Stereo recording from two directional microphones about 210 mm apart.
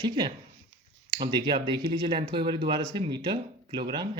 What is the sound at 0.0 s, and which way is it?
Speech, 20° right (ahead or behind).